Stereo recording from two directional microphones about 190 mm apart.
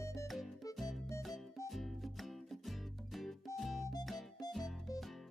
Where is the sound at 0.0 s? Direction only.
15° left (ahead or behind).